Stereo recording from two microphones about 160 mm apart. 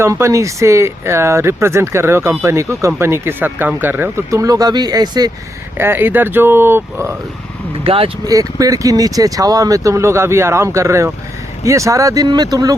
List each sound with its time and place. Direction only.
0.0 s speech: 20° right (ahead or behind)
5.7 s speech: 15° right (ahead or behind)
7.9 s speech: 35° right (ahead or behind)
8.2 s speech: 20° right (ahead or behind)